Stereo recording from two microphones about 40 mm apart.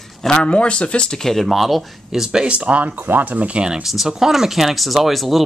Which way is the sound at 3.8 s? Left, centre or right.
Centre.